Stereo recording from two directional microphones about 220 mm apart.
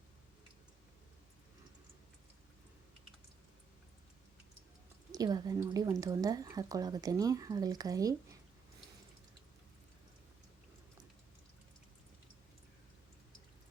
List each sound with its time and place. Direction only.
5.1 s speech: 15° right (ahead or behind)